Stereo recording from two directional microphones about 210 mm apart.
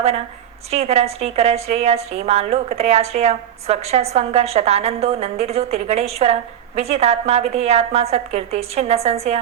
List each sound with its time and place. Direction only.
0.7 s a woman's voice: 30° right (ahead or behind)